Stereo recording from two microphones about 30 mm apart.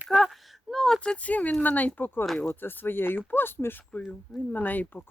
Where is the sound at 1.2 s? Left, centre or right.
Left.